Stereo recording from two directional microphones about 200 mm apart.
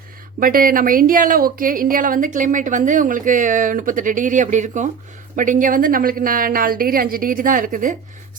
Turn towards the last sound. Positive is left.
turn(degrees=-40)  # may be behind; listen again after turning